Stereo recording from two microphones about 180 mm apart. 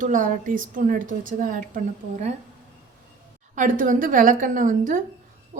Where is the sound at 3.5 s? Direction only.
45° right (ahead or behind).